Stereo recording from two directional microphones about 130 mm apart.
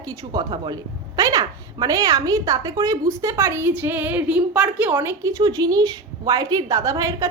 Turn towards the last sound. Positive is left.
turn(degrees=-25)  # may be behind; listen again after turning